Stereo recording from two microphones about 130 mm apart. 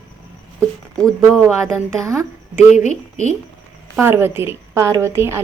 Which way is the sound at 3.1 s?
70° right (ahead or behind).